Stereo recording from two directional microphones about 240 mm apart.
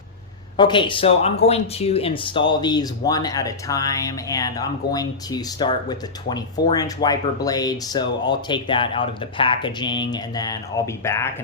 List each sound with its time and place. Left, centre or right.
0.5 s speech: centre